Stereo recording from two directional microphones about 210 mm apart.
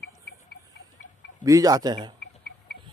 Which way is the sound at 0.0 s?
45° left (ahead or behind).